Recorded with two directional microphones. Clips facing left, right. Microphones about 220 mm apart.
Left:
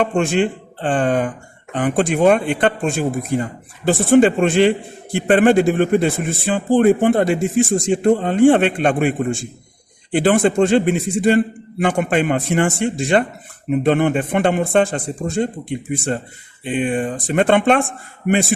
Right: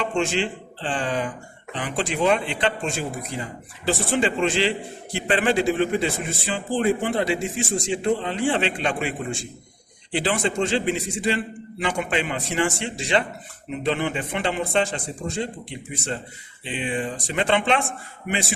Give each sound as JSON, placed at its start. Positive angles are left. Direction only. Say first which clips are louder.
{"t": 0.0, "sound": "speech", "louder": "left 7 dB", "side_deg": 55}